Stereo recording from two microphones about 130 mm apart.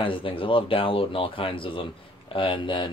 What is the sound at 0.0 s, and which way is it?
Speech, 40° left (ahead or behind).